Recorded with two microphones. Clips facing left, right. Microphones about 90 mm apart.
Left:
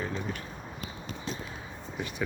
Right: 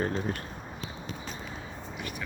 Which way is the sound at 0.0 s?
55° right (ahead or behind).